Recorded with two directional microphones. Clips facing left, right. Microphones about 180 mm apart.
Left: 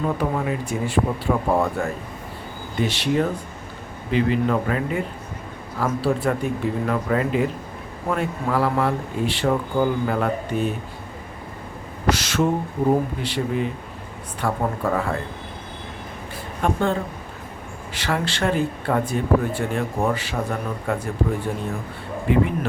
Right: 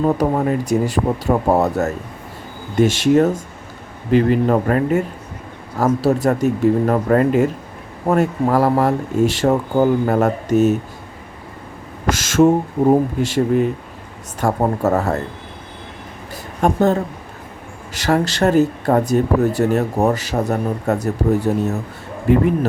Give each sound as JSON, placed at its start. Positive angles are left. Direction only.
{"t": 0.0, "sound": "speech", "side_deg": -40}
{"t": 12.1, "sound": "speech", "side_deg": -45}
{"t": 16.3, "sound": "a sound", "side_deg": -45}
{"t": 17.9, "sound": "speech", "side_deg": -40}